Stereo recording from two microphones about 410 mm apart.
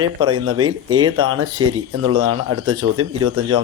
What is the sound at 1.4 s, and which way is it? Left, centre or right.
Speech, right.